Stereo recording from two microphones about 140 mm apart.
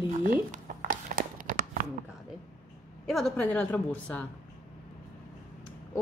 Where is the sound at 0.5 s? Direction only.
75° right (ahead or behind).